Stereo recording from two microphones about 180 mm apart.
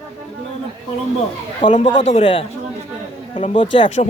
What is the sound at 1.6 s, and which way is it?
Speech, 25° left (ahead or behind).